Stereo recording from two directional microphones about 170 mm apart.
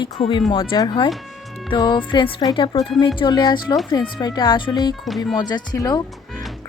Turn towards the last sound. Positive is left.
turn(degrees=20)  # may be behind; listen again after turning